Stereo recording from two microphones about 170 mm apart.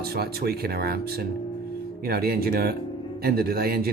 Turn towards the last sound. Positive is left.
turn(degrees=-65)  # may be behind; listen again after turning